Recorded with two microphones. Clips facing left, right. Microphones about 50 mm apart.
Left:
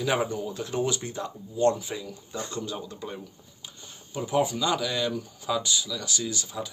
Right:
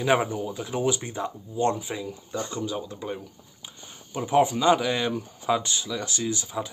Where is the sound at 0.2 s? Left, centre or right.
Centre.